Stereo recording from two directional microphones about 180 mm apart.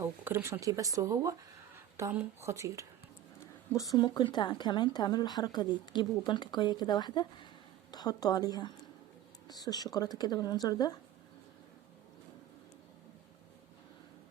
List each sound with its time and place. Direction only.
0.0 s speech: 15° right (ahead or behind)
3.4 s a woman's voice: 15° left (ahead or behind)